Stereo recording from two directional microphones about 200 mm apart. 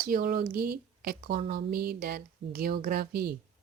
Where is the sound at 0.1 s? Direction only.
45° right (ahead or behind).